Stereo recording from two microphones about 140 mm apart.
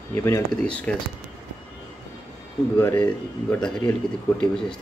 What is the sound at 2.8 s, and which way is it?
Speech, 10° left (ahead or behind).